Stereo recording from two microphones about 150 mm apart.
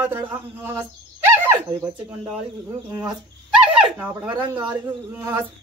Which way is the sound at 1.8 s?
25° right (ahead or behind).